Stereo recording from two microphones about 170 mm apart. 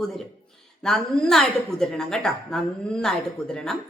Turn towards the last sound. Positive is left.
turn(degrees=5)  # may be behind; listen again after turning